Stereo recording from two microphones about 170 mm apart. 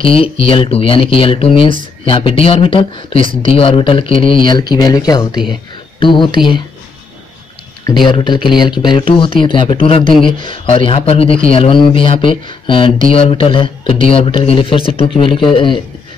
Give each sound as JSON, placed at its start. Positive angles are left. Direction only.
{"t": 0.0, "sound": "speech", "side_deg": 35}
{"t": 8.1, "sound": "speech", "side_deg": 30}